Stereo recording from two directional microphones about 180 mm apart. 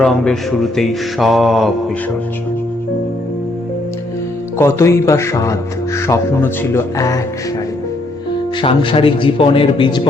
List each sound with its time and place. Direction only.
0.0 s mantra: centre (ahead or behind)
4.5 s speech: 15° left (ahead or behind)
8.6 s a man's voice: 30° left (ahead or behind)